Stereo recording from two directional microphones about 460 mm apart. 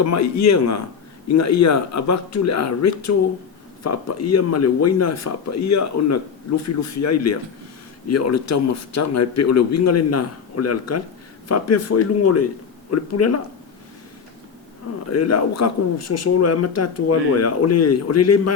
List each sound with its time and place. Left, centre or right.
0.0 s a man's voice: left
15.1 s a man's voice: left